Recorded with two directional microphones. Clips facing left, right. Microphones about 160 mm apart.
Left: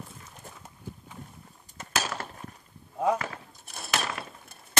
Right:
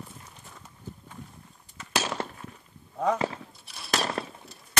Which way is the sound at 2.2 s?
25° right (ahead or behind).